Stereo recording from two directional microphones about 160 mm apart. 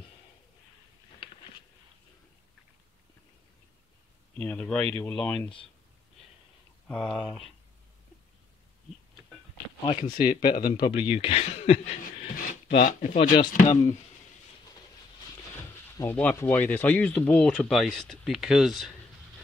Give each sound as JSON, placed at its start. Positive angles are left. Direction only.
{"t": 4.4, "sound": "speech", "side_deg": 5}
{"t": 6.9, "sound": "speech", "side_deg": 5}
{"t": 9.8, "sound": "speech", "side_deg": 35}
{"t": 10.1, "sound": "speech", "side_deg": 60}
{"t": 10.9, "sound": "speech", "side_deg": 35}
{"t": 12.4, "sound": "a sound", "side_deg": 60}
{"t": 13.5, "sound": "speech", "side_deg": 50}
{"t": 16.0, "sound": "speech", "side_deg": 10}